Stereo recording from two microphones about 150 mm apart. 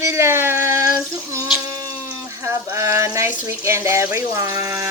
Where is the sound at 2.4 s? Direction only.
20° right (ahead or behind).